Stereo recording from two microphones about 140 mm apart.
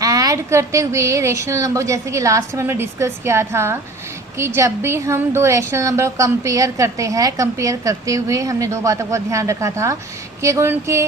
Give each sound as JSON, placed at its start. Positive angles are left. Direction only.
{"t": 0.0, "sound": "a woman's voice", "side_deg": -25}